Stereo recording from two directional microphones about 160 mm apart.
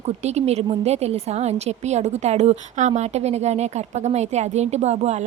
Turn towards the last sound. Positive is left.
turn(degrees=-45)  # may be behind; listen again after turning